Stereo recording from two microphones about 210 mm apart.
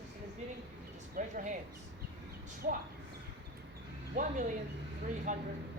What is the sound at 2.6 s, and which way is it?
Speech, 45° right (ahead or behind).